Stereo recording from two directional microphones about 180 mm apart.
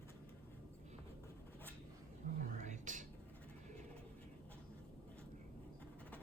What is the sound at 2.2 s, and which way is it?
Whispering, 50° right (ahead or behind).